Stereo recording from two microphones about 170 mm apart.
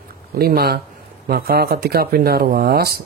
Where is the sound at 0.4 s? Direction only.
65° right (ahead or behind).